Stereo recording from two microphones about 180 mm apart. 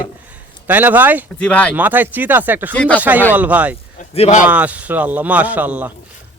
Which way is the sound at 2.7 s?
10° left (ahead or behind).